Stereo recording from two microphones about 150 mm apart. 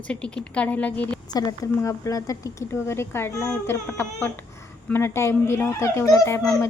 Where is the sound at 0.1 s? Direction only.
5° left (ahead or behind).